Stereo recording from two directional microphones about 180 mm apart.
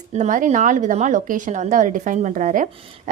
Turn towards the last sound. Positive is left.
turn(degrees=-45)  # may be behind; listen again after turning